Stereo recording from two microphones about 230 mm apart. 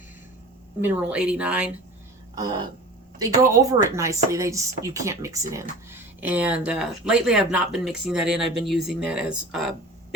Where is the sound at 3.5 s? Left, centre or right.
Centre.